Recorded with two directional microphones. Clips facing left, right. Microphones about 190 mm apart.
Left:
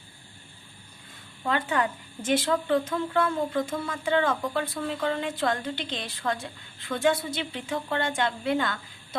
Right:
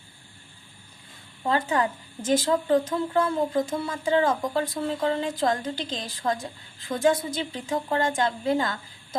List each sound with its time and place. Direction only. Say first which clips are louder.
1.5 s a woman's voice: right 2 dB; 35° right (ahead or behind)